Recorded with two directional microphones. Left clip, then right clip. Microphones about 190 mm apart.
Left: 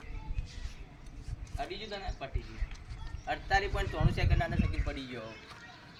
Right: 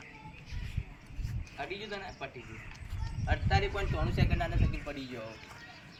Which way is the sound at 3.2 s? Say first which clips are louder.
Left 2 dB; 15° left (ahead or behind).